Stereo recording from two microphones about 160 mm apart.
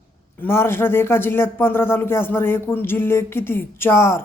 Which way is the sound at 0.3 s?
15° left (ahead or behind).